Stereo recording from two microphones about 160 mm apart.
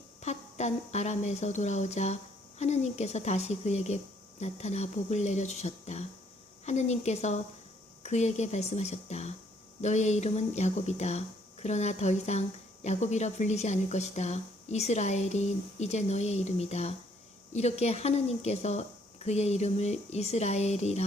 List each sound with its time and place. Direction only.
0.2 s a woman's voice: 45° left (ahead or behind)